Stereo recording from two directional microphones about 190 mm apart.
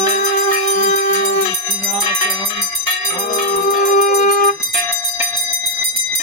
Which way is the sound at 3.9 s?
45° left (ahead or behind).